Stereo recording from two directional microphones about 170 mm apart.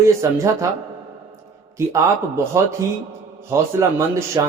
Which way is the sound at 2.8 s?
20° right (ahead or behind).